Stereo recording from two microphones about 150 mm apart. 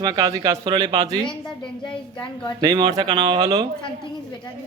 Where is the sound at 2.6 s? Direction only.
25° right (ahead or behind).